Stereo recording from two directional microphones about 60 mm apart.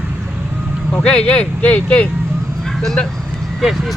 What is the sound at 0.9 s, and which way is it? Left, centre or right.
Speech, centre.